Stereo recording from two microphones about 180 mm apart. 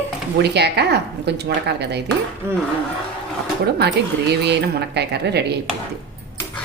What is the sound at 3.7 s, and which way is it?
Speech, 65° right (ahead or behind).